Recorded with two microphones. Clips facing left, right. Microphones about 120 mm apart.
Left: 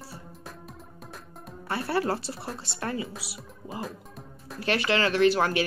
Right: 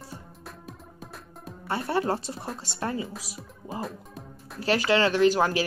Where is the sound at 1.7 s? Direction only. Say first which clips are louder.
Right 1 dB; 30° right (ahead or behind).